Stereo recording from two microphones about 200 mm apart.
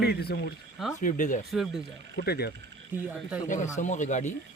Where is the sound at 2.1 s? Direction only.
55° left (ahead or behind).